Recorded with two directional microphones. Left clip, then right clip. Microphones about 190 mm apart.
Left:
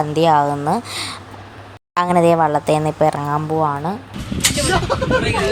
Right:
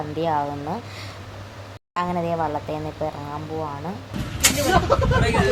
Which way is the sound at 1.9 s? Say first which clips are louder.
Left 10 dB; 40° left (ahead or behind).